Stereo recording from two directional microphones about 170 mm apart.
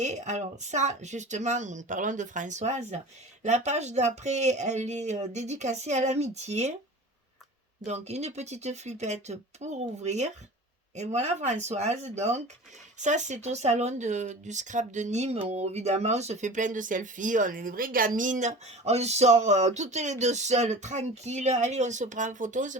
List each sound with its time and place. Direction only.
0.0 s speech: 45° right (ahead or behind)
7.9 s speech: 40° right (ahead or behind)